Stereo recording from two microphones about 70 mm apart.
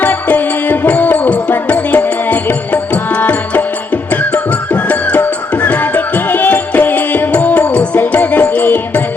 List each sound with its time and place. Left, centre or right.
0.0 s music: left